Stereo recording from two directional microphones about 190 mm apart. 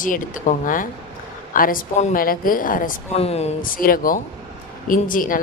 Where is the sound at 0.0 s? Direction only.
45° left (ahead or behind).